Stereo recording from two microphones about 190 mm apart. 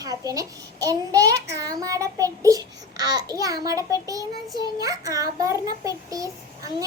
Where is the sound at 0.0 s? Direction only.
20° right (ahead or behind).